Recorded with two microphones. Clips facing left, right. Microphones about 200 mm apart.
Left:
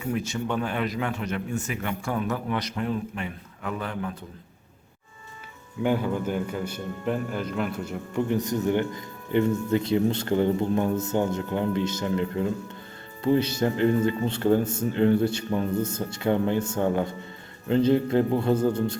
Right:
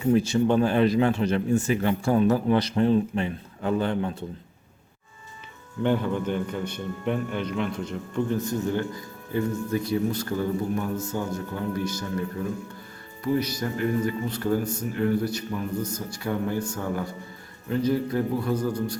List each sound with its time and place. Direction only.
0.0 s speech: 30° right (ahead or behind)
5.8 s a man's voice: 5° left (ahead or behind); by 18.9 s 25° left (ahead or behind)